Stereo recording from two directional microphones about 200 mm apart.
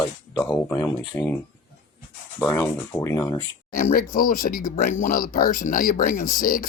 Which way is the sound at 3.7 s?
45° left (ahead or behind).